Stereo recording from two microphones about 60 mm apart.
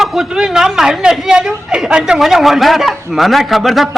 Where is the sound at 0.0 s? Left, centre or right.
Centre.